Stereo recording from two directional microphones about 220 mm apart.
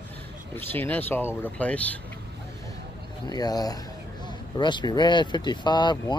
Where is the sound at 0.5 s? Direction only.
10° left (ahead or behind).